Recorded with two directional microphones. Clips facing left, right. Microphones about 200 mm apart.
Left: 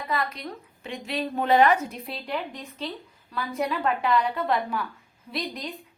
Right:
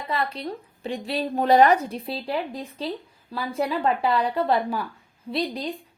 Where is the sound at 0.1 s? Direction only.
30° right (ahead or behind).